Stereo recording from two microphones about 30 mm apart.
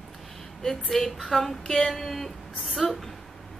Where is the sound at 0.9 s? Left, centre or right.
Centre.